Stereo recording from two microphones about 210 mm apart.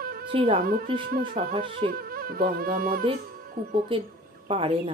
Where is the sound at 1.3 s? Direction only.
40° right (ahead or behind).